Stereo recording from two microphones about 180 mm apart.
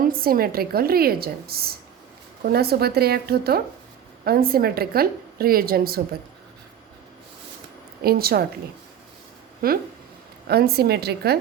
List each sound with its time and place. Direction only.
0.0 s a woman's voice: 55° right (ahead or behind)
8.0 s a woman's voice: 60° right (ahead or behind)
9.6 s a woman's voice: 55° right (ahead or behind)